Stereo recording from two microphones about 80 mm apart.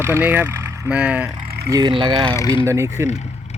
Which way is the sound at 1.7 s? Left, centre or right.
Right.